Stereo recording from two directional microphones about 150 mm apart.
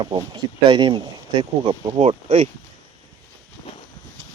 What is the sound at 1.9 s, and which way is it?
Speech, 45° right (ahead or behind).